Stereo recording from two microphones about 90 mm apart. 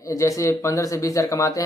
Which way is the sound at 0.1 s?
35° left (ahead or behind).